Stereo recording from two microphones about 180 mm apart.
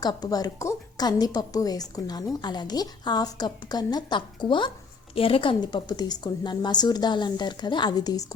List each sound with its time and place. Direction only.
0.0 s a woman's voice: 20° left (ahead or behind)